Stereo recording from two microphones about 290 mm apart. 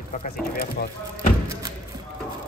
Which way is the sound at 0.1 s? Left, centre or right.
Left.